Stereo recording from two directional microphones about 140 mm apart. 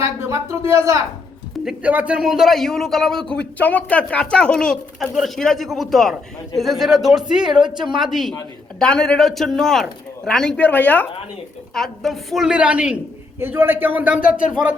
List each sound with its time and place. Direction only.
0.0 s speech: 20° right (ahead or behind)
1.5 s speech: 5° right (ahead or behind)